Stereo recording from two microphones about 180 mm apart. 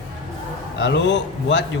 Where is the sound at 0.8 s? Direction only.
75° left (ahead or behind).